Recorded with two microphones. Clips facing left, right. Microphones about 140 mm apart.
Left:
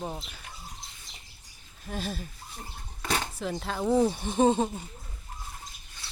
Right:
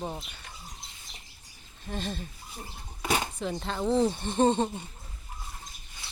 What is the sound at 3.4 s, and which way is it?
Speech, centre (ahead or behind).